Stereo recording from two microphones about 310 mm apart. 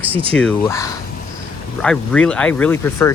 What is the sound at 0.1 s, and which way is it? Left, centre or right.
Speech, centre.